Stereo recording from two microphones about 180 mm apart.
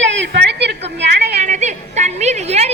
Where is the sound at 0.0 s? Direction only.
85° right.